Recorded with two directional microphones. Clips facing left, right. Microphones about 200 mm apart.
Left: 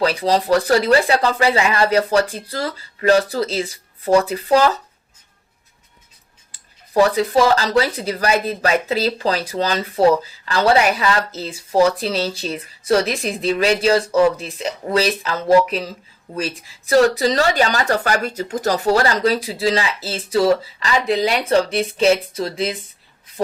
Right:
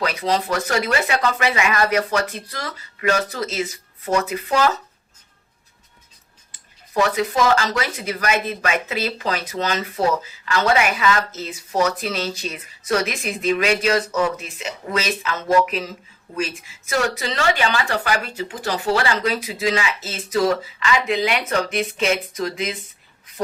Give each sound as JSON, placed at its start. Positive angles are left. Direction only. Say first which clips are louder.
{"t": 0.0, "sound": "speech", "louder": "left 4 dB", "side_deg": 30}
{"t": 6.5, "sound": "speech", "louder": "left 6 dB", "side_deg": 35}